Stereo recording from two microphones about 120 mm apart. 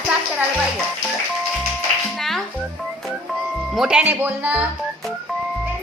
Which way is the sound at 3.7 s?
10° right (ahead or behind).